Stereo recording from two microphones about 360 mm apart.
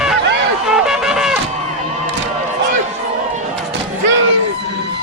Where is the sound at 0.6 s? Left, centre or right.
Centre.